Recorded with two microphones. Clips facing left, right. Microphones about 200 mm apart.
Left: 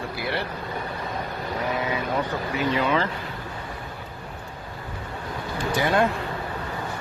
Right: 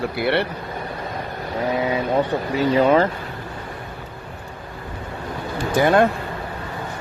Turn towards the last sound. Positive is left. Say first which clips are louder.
# right 6 dB
turn(degrees=-55)  # may be behind; listen again after turning